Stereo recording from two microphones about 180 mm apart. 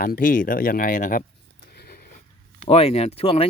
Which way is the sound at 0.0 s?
50° left (ahead or behind).